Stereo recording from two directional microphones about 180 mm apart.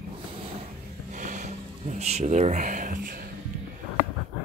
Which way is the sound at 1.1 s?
45° right (ahead or behind).